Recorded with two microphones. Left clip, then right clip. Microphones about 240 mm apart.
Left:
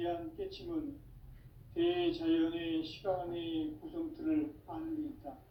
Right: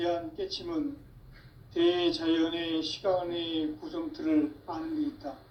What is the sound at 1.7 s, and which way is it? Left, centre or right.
Speech, right.